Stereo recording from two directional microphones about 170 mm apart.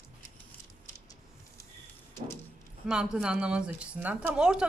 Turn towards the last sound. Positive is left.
turn(degrees=-5)  # may be behind; listen again after turning